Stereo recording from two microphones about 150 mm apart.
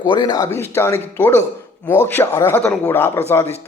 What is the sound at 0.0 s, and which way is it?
A man's voice, 30° left (ahead or behind).